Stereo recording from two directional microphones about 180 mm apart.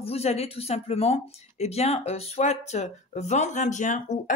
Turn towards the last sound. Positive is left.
turn(degrees=45)  # may be behind; listen again after turning